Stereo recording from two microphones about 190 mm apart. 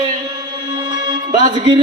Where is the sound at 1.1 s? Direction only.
25° right (ahead or behind).